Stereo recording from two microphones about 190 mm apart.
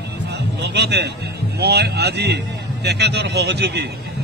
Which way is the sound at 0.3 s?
65° right (ahead or behind).